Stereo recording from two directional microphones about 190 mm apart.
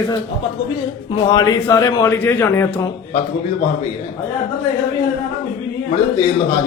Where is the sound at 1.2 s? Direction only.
20° left (ahead or behind).